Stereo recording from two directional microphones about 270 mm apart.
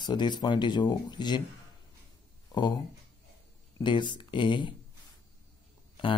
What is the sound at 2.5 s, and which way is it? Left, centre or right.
Speech, centre.